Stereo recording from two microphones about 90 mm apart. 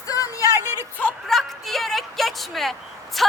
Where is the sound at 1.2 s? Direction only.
Centre (ahead or behind).